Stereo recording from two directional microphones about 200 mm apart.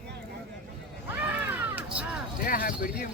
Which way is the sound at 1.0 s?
10° right (ahead or behind).